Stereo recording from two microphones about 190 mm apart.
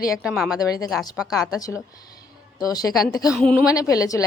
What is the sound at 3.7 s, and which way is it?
Speech, 20° left (ahead or behind).